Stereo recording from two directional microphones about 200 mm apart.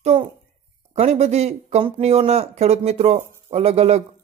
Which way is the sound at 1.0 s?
35° right (ahead or behind).